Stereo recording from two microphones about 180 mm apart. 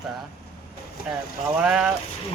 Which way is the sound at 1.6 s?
5° right (ahead or behind).